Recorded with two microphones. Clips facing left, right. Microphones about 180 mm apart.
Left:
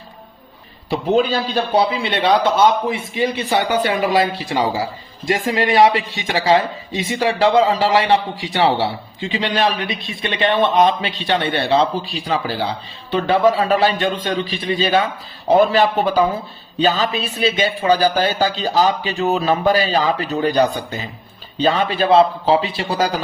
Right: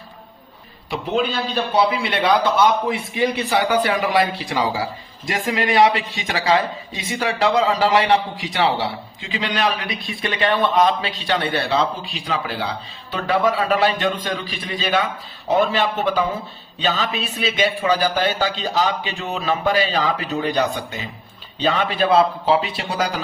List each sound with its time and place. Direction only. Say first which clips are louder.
1.7 s a man's voice: left 1 dB; 30° left (ahead or behind)